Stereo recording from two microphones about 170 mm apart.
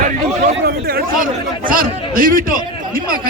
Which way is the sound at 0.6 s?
65° right (ahead or behind).